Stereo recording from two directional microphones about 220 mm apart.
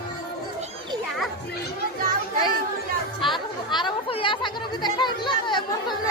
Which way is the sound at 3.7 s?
20° left (ahead or behind).